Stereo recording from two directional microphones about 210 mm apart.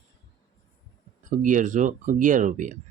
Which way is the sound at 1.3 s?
35° right (ahead or behind).